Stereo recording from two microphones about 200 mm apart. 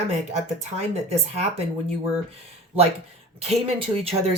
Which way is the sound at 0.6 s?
30° right (ahead or behind).